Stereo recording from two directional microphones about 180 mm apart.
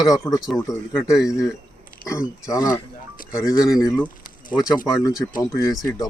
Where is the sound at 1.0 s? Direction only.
5° right (ahead or behind).